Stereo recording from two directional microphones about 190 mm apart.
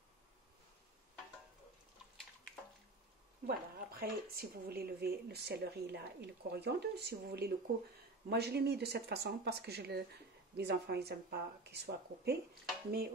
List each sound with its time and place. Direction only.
3.4 s speech: 50° right (ahead or behind)